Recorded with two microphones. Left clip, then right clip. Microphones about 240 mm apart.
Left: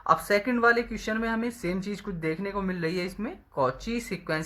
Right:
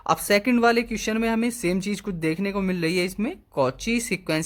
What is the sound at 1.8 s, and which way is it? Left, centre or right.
Speech, right.